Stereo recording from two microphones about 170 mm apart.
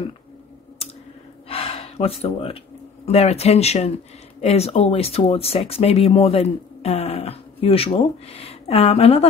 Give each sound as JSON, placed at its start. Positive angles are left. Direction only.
{"t": 1.5, "sound": "gasp", "side_deg": 35}
{"t": 3.1, "sound": "speech", "side_deg": 40}